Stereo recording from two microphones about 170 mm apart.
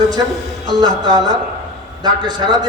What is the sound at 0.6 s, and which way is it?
A man's voice, 25° right (ahead or behind).